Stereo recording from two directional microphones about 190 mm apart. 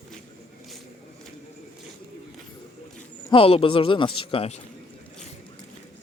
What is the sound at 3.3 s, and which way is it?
Speech, 30° left (ahead or behind).